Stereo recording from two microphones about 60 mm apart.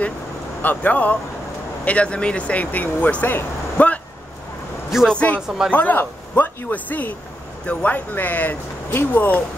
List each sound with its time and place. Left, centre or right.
0.6 s speech: left
5.0 s speech: left